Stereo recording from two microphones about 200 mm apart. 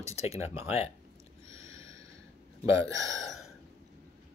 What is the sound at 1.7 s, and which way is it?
Snort, 15° right (ahead or behind).